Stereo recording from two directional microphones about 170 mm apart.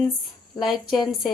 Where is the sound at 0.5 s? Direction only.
Centre (ahead or behind).